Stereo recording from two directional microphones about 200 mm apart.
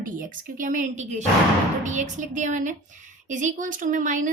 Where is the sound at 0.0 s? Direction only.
40° right (ahead or behind).